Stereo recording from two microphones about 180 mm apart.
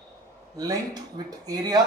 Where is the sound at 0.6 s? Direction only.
20° right (ahead or behind).